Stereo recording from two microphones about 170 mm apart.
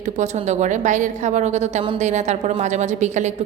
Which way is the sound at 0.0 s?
45° right (ahead or behind).